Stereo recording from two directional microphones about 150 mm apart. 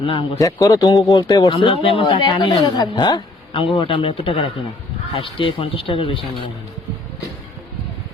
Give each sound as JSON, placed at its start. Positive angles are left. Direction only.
{"t": 0.0, "sound": "speech", "side_deg": 35}
{"t": 0.3, "sound": "speech", "side_deg": 20}